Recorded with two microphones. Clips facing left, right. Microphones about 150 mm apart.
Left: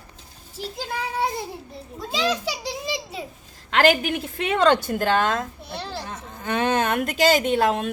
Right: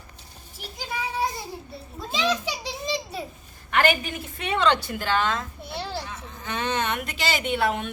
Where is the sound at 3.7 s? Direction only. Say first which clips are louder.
Left 4 dB; 85° left.